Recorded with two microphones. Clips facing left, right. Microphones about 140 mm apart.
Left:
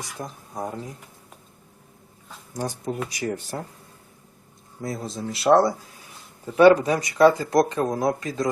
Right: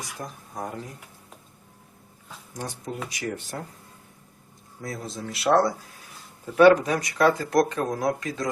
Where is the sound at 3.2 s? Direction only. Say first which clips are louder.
Left 3 dB; 25° left (ahead or behind).